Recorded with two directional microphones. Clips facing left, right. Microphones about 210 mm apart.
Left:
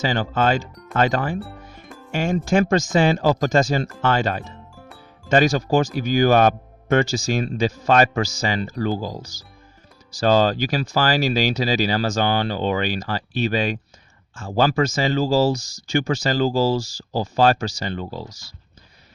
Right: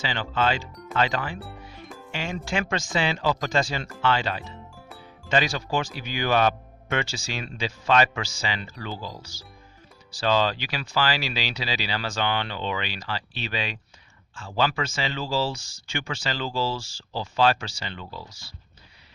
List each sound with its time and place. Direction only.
0.0 s speech: 45° left (ahead or behind)
0.7 s speech: centre (ahead or behind)
0.9 s speech: 45° left (ahead or behind)
4.7 s music: centre (ahead or behind)
5.3 s speech: 45° left (ahead or behind)